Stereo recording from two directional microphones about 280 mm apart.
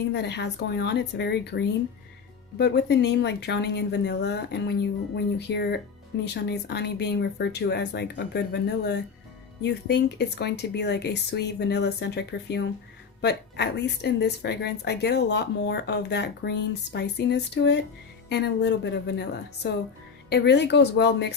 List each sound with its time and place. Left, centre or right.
0.1 s speech: left